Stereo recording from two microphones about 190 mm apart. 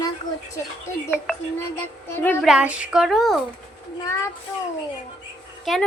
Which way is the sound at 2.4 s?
5° right (ahead or behind).